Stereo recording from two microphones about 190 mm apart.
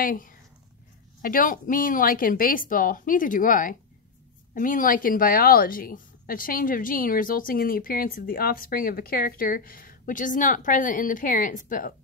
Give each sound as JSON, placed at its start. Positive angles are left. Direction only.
{"t": 0.0, "sound": "a woman's voice", "side_deg": 45}